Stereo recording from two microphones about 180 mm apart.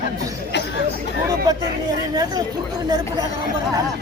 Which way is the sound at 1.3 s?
20° right (ahead or behind).